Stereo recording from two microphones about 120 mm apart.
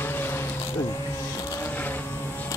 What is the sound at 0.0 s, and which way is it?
Vehicle, 15° left (ahead or behind).